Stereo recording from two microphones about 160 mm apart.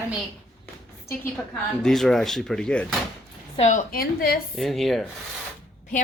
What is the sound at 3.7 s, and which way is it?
Speech, 60° left (ahead or behind).